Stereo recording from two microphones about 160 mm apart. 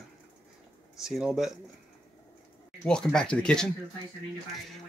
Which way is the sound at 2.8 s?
5° left (ahead or behind).